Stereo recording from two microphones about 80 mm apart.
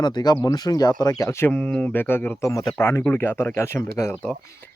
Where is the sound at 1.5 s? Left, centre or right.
Centre.